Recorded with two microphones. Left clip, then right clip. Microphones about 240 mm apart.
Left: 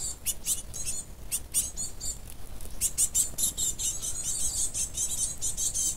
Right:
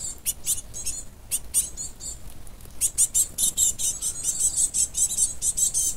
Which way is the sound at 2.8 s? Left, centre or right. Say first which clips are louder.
Right 4 dB; right.